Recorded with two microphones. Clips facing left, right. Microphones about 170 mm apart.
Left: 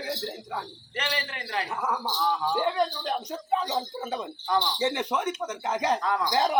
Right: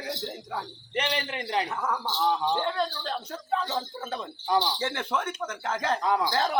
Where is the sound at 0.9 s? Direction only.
20° right (ahead or behind).